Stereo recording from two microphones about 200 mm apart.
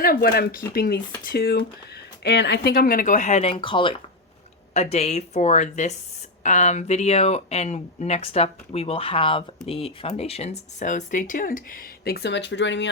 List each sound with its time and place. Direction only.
0.0 s speech: 45° left (ahead or behind)